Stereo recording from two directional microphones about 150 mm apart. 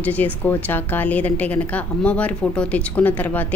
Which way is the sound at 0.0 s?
10° left (ahead or behind).